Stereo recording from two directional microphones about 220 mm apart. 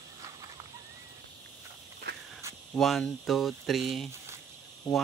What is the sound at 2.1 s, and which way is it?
Walk, 50° right (ahead or behind).